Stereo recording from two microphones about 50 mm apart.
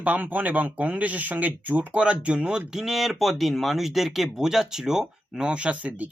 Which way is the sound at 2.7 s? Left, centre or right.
Centre.